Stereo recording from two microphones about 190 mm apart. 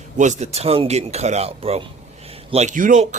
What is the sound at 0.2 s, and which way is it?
Speech, 40° right (ahead or behind).